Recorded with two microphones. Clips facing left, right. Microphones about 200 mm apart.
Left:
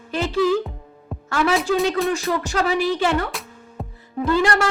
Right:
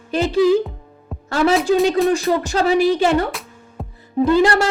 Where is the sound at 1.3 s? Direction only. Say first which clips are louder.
Right 4 dB; 40° right (ahead or behind).